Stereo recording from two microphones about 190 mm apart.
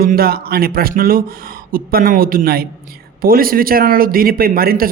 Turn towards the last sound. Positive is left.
turn(degrees=-50)  # may be behind; listen again after turning